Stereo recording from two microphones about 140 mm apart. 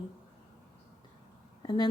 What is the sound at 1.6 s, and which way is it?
Speech, 30° left (ahead or behind).